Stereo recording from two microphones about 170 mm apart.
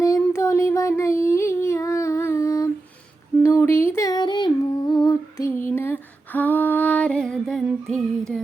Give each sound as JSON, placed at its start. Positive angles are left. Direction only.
{"t": 0.0, "sound": "child singing", "side_deg": 20}
{"t": 3.4, "sound": "humming", "side_deg": 15}
{"t": 5.0, "sound": "lullaby", "side_deg": 20}
{"t": 5.6, "sound": "female singing", "side_deg": 15}